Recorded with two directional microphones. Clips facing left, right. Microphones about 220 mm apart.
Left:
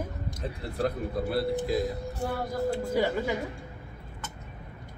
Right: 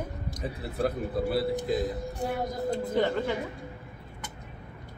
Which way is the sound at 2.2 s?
20° right (ahead or behind).